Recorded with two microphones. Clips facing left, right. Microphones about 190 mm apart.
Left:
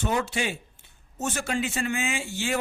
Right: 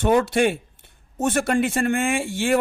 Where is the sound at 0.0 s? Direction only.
55° right (ahead or behind).